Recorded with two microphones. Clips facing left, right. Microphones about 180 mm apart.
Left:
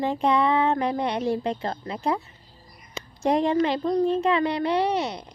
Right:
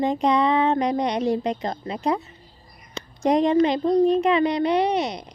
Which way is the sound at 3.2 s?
20° right (ahead or behind).